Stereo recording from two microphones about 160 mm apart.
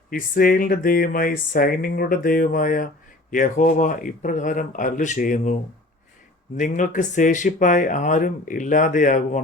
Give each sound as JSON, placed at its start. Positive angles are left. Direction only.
{"t": 0.1, "sound": "speech", "side_deg": 60}
{"t": 6.6, "sound": "speech", "side_deg": 55}